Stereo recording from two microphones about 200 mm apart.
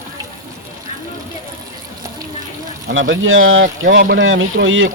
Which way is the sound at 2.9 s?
75° right (ahead or behind).